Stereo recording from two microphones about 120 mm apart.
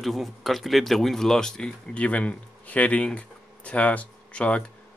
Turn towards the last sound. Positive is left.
turn(degrees=10)  # may be behind; listen again after turning